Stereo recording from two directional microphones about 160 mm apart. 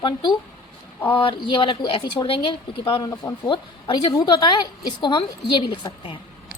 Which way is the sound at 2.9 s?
20° left (ahead or behind).